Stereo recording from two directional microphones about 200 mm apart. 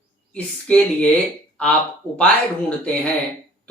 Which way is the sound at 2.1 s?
5° left (ahead or behind).